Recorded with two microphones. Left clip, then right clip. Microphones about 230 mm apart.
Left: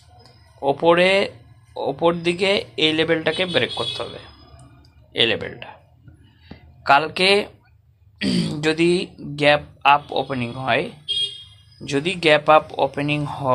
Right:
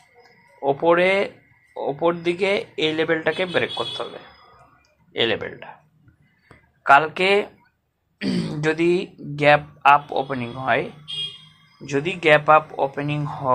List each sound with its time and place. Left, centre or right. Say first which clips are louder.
0.2 s a sound: left 1 dB; left
1.7 s speech: left 2 dB; left
5.1 s speech: left 2 dB; left
6.8 s speech: even; left